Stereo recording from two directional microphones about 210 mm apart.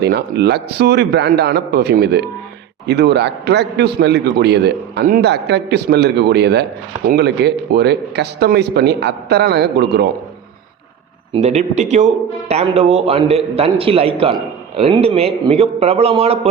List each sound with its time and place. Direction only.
0.0 s a man's voice: 50° right (ahead or behind)
11.3 s a man's voice: 30° right (ahead or behind)